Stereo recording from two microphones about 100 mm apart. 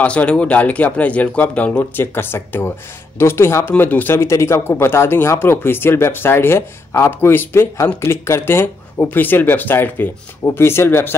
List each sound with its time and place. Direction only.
0.0 s speech: 15° left (ahead or behind)